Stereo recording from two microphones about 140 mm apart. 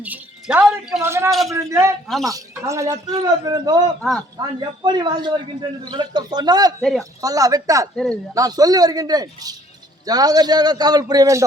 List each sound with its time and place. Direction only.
0.0 s speech: 10° right (ahead or behind)
1.0 s a man's voice: 20° right (ahead or behind)
1.3 s speech: centre (ahead or behind)
2.3 s a man's voice: 20° right (ahead or behind)
7.9 s speech: 5° left (ahead or behind)
8.3 s a man's voice: 25° right (ahead or behind)